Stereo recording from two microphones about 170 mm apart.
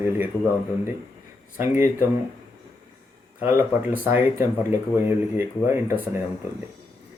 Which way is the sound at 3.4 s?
15° right (ahead or behind).